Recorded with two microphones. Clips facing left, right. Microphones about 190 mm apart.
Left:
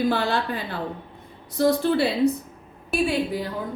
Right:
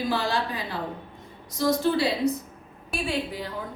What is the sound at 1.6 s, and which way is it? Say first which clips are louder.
Speech: left 3 dB; 60° left (ahead or behind).